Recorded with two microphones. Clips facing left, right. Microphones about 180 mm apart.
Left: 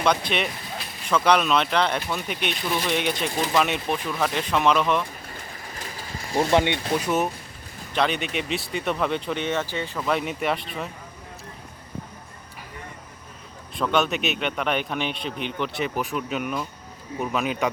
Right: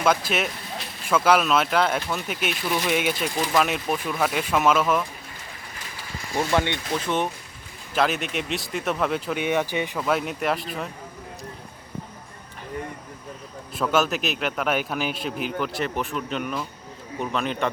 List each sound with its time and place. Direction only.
0.0 s speech: 5° right (ahead or behind)
6.5 s speech: 20° left (ahead or behind)
7.9 s speech: 5° right (ahead or behind)
10.1 s speech: centre (ahead or behind)
13.7 s speech: 5° right (ahead or behind)